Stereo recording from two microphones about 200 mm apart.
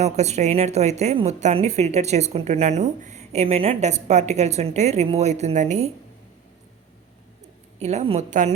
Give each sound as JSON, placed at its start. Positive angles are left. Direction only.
{"t": 0.0, "sound": "a woman's voice", "side_deg": -35}
{"t": 7.8, "sound": "a woman's voice", "side_deg": -35}